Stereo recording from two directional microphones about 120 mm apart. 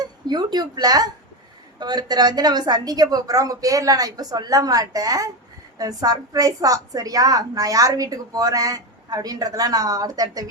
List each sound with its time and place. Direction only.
0.0 s a woman's voice: 35° right (ahead or behind)